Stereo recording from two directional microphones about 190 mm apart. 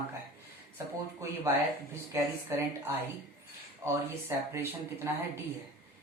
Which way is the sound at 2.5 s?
15° right (ahead or behind).